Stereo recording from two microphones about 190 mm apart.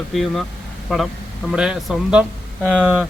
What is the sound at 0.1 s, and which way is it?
Speech, centre (ahead or behind).